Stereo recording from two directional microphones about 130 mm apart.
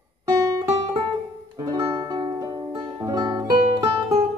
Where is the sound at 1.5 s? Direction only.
35° right (ahead or behind).